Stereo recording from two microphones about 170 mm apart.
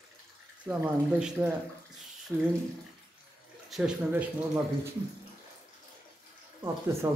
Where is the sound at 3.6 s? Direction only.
Centre (ahead or behind).